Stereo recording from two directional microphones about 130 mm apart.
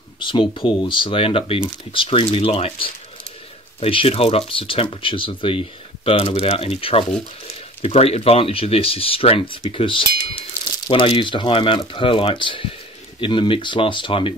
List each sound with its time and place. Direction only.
0.2 s speech: 40° left (ahead or behind)